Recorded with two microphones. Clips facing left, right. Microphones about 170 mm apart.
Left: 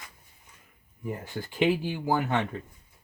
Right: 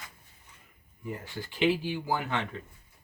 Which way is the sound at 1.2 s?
45° left (ahead or behind).